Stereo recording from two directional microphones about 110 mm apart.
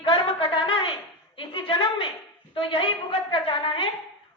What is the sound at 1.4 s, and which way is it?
Music, 50° left (ahead or behind).